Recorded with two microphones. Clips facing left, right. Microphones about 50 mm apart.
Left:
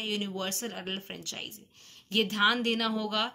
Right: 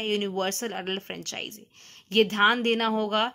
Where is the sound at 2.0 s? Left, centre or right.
Right.